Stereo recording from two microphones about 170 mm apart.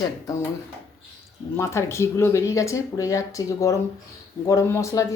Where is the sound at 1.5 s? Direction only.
15° left (ahead or behind).